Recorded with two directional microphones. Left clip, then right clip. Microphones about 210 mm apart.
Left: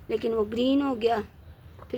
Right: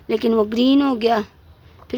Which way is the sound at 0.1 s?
45° right (ahead or behind).